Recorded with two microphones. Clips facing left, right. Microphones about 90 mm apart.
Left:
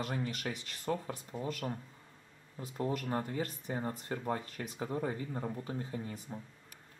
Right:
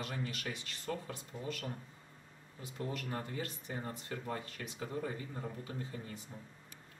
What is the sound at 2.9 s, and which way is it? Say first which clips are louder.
Speech: left 5 dB; 45° left (ahead or behind).